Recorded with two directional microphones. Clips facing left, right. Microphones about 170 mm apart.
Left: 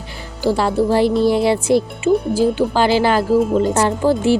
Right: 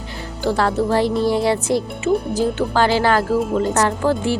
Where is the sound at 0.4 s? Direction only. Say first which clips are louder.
Left 2 dB; 10° left (ahead or behind).